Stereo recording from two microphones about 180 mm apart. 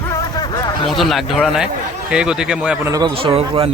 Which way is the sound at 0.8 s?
Centre (ahead or behind).